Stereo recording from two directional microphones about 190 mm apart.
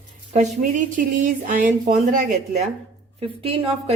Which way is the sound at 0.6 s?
45° right (ahead or behind).